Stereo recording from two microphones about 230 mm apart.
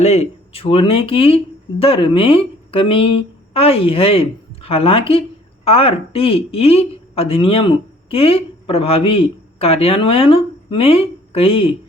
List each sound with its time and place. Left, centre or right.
0.0 s speech: left